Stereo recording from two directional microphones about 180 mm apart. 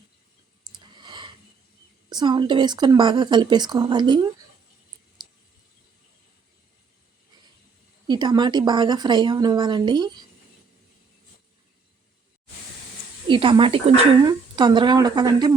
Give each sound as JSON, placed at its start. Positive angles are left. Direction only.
{"t": 0.6, "sound": "a sound", "side_deg": -25}
{"t": 2.0, "sound": "speech", "side_deg": -25}
{"t": 8.0, "sound": "speech", "side_deg": -25}
{"t": 13.2, "sound": "speech", "side_deg": -30}